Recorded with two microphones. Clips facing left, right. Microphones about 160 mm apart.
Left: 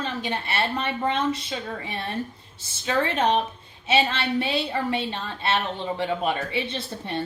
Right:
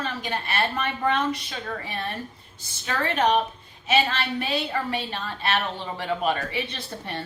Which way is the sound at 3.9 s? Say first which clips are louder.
Left 1 dB; 25° left (ahead or behind).